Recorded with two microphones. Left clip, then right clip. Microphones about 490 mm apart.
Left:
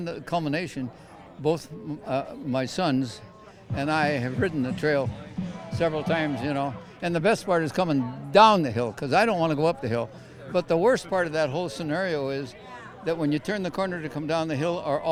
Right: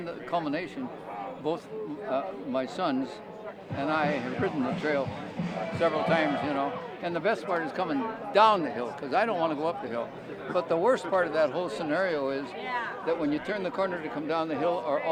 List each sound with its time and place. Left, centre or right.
0.0 s speech: left
5.8 s speech: left